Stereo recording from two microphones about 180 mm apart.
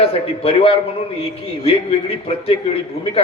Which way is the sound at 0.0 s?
35° left (ahead or behind).